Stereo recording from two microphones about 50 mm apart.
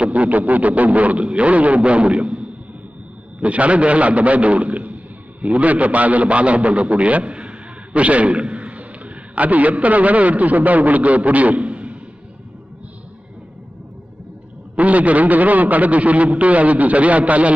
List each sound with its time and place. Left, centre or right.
0.0 s a man's voice: right
14.8 s a man's voice: right